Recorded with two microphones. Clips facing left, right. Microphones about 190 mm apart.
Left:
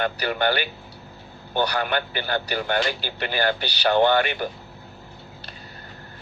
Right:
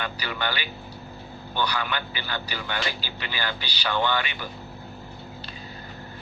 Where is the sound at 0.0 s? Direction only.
50° left (ahead or behind).